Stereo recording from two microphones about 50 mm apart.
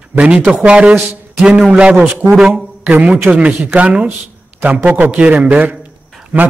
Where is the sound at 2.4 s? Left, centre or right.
Centre.